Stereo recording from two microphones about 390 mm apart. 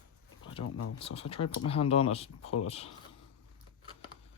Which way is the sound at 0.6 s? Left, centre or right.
Left.